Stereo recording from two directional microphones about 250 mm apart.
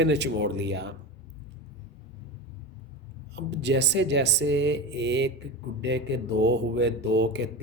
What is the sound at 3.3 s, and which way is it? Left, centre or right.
Speech, right.